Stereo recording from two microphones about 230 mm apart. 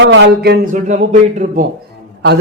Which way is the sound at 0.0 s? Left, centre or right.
Right.